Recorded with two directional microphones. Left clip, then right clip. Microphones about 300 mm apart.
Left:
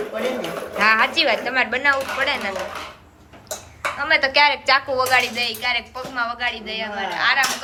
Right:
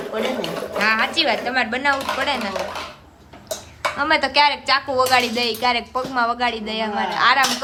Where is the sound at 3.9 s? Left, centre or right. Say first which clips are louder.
Even; centre.